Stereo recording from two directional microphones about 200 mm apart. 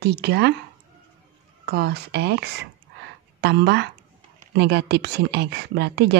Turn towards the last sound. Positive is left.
turn(degrees=-60)  # may be behind; listen again after turning